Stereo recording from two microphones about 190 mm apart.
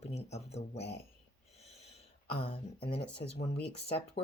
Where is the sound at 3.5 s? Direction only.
30° left (ahead or behind).